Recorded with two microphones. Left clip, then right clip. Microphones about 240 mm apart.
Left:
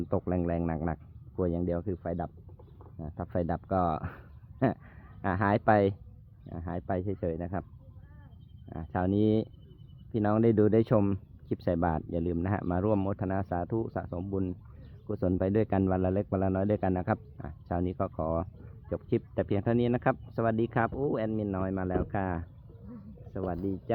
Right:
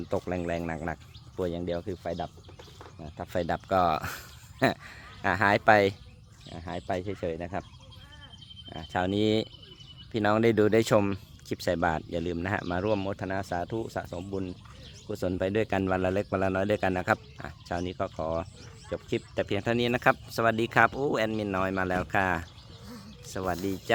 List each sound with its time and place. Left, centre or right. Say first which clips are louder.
0.1 s speech: right 1 dB; centre
8.7 s speech: right 2 dB; centre